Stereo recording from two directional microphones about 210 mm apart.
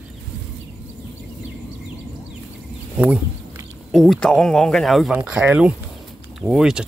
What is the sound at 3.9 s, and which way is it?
Speech, centre (ahead or behind).